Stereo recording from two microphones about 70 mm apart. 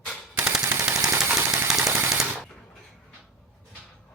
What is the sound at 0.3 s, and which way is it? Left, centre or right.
Machine gun, right.